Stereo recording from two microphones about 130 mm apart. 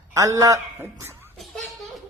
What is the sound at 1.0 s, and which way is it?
Laughter, 20° right (ahead or behind).